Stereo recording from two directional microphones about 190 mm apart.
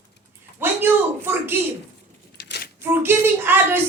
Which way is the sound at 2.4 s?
60° left (ahead or behind).